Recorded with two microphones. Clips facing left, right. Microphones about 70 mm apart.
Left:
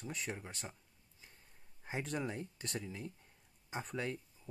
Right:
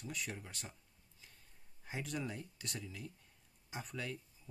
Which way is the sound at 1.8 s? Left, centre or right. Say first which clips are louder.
Left 3 dB; left.